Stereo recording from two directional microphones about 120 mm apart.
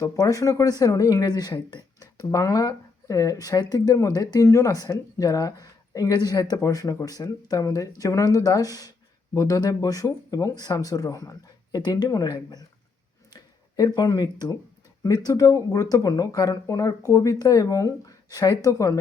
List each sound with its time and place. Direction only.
0.0 s speech: 30° left (ahead or behind)